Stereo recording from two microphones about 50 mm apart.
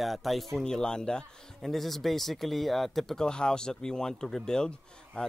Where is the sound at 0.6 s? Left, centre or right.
Centre.